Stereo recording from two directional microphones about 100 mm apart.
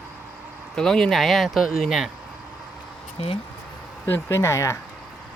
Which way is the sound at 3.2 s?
90° left.